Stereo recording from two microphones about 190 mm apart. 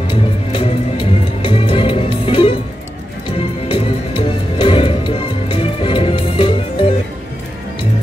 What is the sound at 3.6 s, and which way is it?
Music, 30° left (ahead or behind).